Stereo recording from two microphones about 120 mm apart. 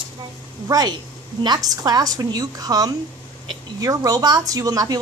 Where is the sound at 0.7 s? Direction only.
35° right (ahead or behind).